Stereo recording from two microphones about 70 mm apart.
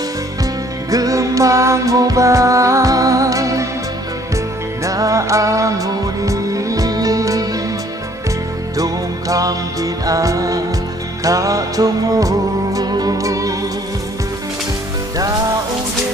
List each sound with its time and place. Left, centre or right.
0.8 s music: right
4.8 s music: right
8.7 s music: right